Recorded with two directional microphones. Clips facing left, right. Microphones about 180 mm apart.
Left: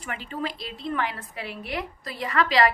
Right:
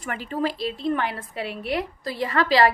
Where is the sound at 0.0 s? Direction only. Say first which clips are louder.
Right 5 dB; 40° right (ahead or behind).